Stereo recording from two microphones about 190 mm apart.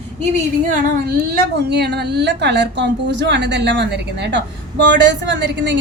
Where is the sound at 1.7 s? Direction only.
60° right (ahead or behind).